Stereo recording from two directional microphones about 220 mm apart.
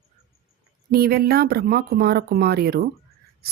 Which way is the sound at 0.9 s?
45° right (ahead or behind).